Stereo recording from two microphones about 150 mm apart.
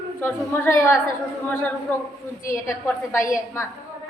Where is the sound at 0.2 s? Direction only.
15° left (ahead or behind).